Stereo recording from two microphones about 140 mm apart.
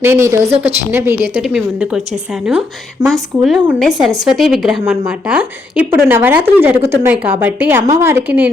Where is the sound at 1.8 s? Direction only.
5° right (ahead or behind).